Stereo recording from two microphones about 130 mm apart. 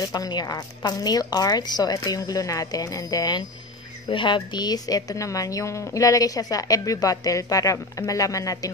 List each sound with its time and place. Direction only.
0.0 s a woman's voice: 30° left (ahead or behind)